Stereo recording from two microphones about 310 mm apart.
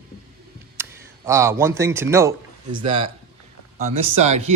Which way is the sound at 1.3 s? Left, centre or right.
Centre.